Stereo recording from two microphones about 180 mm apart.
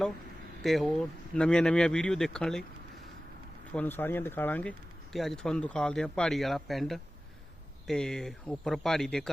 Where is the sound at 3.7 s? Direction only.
10° left (ahead or behind).